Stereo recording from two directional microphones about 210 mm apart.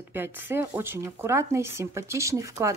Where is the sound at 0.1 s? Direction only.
10° right (ahead or behind).